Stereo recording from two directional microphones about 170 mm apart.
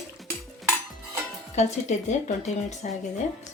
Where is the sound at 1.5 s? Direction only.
40° left (ahead or behind).